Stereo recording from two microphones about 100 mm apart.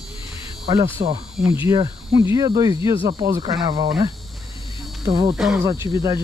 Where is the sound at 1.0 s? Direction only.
80° right.